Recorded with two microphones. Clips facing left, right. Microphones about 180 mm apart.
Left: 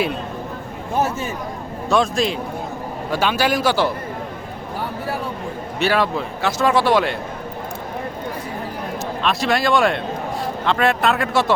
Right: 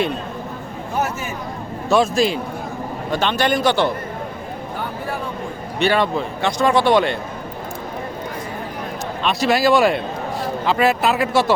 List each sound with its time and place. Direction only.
0.9 s speech: 30° left (ahead or behind)
1.9 s speech: centre (ahead or behind)
5.8 s speech: centre (ahead or behind)
9.2 s speech: centre (ahead or behind)